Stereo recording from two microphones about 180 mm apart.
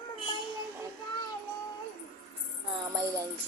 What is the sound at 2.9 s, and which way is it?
Speech, 15° right (ahead or behind).